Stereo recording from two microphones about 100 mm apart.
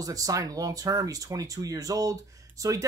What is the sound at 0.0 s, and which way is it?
Speech, 35° right (ahead or behind).